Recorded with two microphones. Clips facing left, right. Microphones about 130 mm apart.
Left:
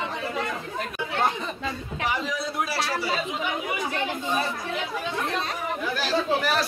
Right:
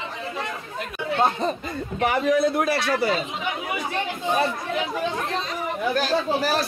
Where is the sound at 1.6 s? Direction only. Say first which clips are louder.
Right 4 dB; 55° right (ahead or behind).